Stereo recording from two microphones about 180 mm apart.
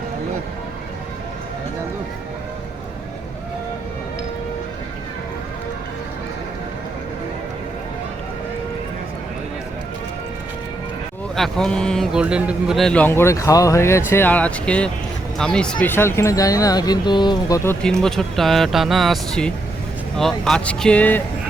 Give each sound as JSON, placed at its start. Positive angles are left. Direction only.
{"t": 11.3, "sound": "a man's voice", "side_deg": 0}
{"t": 17.8, "sound": "speech", "side_deg": 5}